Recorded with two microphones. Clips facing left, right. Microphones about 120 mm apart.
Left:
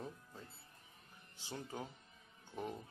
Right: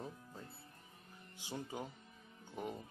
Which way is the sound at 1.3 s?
10° right (ahead or behind).